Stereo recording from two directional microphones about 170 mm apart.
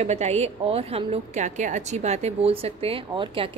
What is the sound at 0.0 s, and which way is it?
A woman's voice, 40° right (ahead or behind).